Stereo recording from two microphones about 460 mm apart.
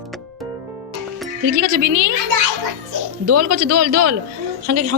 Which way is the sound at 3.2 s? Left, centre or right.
Right.